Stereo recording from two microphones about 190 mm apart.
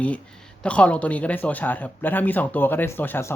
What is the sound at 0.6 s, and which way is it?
Speech, 5° left (ahead or behind).